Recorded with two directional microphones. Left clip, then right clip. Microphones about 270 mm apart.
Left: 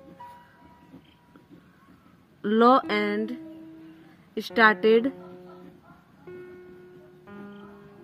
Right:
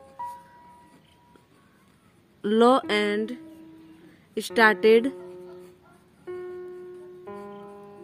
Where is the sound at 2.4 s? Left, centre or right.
Centre.